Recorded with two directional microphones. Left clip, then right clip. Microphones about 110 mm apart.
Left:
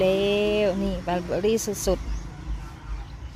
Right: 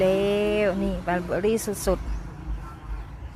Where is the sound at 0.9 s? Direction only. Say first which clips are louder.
Even; 15° left (ahead or behind).